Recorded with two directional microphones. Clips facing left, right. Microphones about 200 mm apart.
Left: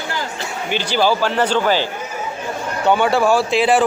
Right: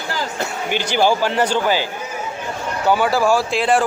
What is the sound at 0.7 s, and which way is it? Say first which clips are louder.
Speech: even; 15° right (ahead or behind).